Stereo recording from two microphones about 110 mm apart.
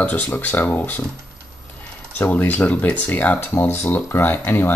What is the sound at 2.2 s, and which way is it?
Speech, 15° left (ahead or behind).